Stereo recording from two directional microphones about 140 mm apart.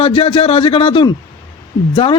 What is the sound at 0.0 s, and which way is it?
A man's voice, 40° left (ahead or behind).